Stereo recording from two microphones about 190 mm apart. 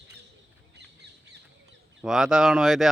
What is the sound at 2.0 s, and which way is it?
Speech, 5° right (ahead or behind).